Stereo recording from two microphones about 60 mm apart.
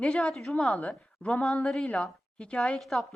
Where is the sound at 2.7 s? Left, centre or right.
Centre.